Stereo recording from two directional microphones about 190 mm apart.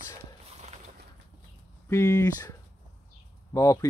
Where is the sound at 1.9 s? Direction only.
15° left (ahead or behind).